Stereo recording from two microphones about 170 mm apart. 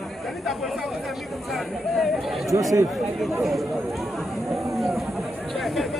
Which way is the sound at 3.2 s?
Centre (ahead or behind).